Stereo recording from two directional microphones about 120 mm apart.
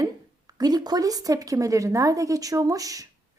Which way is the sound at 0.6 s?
35° right (ahead or behind).